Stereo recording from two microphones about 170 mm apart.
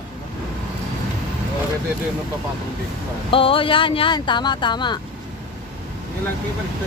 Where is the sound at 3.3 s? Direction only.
30° left (ahead or behind).